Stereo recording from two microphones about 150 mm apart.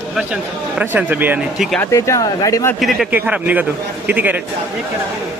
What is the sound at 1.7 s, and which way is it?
Speech, 20° left (ahead or behind).